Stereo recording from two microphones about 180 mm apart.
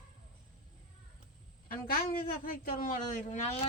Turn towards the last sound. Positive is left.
turn(degrees=45)  # may be behind; listen again after turning